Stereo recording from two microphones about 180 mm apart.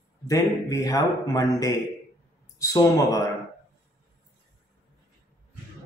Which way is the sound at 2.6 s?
20° left (ahead or behind).